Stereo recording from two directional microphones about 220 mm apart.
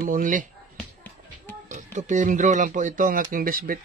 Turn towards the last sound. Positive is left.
turn(degrees=-40)  # may be behind; listen again after turning